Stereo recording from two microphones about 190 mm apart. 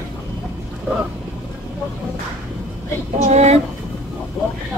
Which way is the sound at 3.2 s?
35° right (ahead or behind).